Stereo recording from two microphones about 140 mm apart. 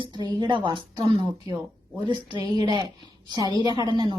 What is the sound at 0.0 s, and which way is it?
A woman's voice, 30° right (ahead or behind).